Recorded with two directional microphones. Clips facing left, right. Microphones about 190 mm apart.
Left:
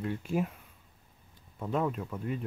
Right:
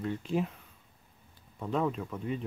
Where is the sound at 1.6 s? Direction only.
5° left (ahead or behind).